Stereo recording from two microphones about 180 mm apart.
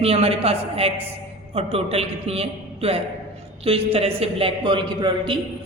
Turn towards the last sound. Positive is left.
turn(degrees=-25)  # may be behind; listen again after turning